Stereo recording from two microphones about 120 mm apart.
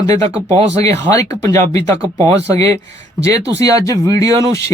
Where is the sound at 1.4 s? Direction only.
25° left (ahead or behind).